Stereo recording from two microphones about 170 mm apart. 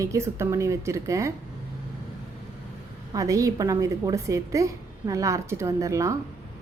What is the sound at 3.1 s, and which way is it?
A woman's voice, 20° right (ahead or behind).